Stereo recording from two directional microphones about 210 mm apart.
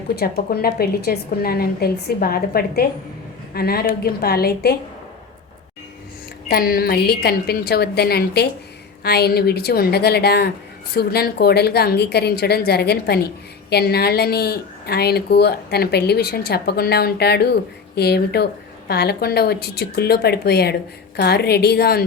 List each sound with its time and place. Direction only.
0.2 s a woman's voice: 45° left (ahead or behind)
6.5 s a woman's voice: 45° left (ahead or behind)